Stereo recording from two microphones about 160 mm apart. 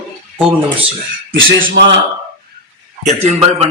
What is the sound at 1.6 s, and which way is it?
Speech, 65° right (ahead or behind).